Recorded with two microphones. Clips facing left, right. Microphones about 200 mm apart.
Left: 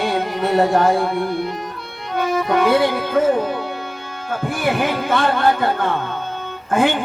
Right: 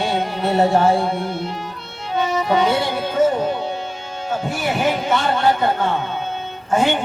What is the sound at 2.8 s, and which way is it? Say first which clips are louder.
Music: left 2 dB; 55° left (ahead or behind).